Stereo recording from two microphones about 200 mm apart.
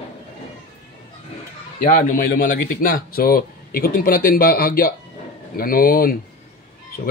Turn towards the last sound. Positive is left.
turn(degrees=45)  # may be behind; listen again after turning